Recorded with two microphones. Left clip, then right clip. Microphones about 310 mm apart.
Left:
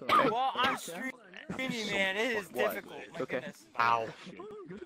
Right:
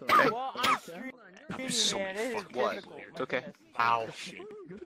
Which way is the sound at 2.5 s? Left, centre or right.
Right.